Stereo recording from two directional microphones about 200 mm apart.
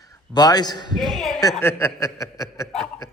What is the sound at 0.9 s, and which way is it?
Speech, centre (ahead or behind).